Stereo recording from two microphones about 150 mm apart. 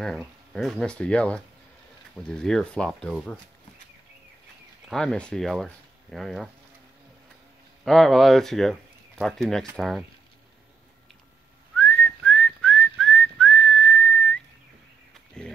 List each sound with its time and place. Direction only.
0.0 s speech: 5° left (ahead or behind)
4.8 s speech: 5° left (ahead or behind)
7.8 s speech: centre (ahead or behind)
11.7 s whistling: 10° left (ahead or behind)